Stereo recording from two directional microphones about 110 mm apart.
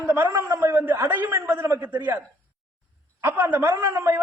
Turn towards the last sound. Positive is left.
turn(degrees=-20)  # may be behind; listen again after turning